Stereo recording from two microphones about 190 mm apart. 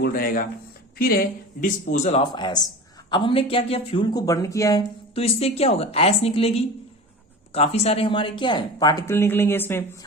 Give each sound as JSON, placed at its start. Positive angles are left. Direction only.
{"t": 0.0, "sound": "speech", "side_deg": 50}
{"t": 1.9, "sound": "speech", "side_deg": 35}
{"t": 5.1, "sound": "a woman's voice", "side_deg": 30}